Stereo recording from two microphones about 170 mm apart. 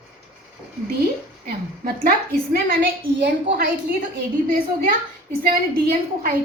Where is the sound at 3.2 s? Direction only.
60° right (ahead or behind).